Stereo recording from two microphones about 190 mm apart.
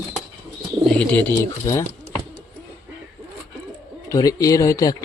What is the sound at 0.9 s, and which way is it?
Bird, 5° left (ahead or behind).